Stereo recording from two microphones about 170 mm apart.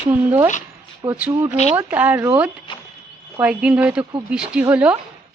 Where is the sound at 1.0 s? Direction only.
30° right (ahead or behind).